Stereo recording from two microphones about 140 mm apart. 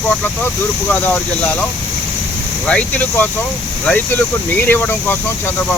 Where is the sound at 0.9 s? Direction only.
10° left (ahead or behind).